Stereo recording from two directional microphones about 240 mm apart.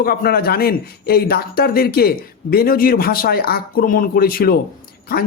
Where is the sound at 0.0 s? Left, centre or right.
Left.